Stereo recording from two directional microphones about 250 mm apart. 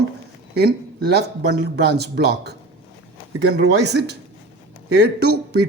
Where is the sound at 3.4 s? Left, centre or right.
Right.